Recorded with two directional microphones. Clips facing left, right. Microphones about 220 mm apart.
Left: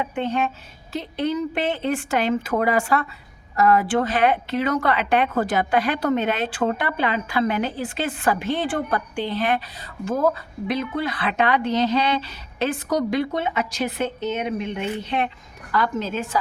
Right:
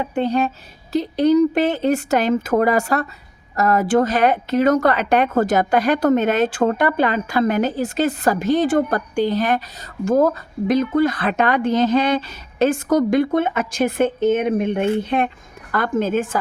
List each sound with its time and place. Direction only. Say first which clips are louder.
0.0 s a woman's voice: right 4 dB; 35° right (ahead or behind)